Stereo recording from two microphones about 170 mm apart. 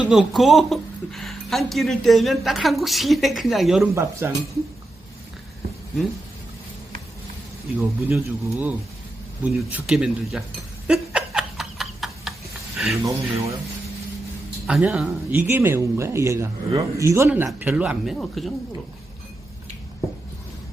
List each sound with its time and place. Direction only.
0.0 s speech: 5° right (ahead or behind)
4.2 s speech: 15° right (ahead or behind)
7.8 s speech: 10° right (ahead or behind)
10.8 s a sound: 5° right (ahead or behind)
12.9 s speech: 20° right (ahead or behind)
14.7 s speech: 5° right (ahead or behind)